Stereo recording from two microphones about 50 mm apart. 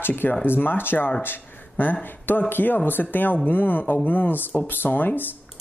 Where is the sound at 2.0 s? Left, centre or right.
Left.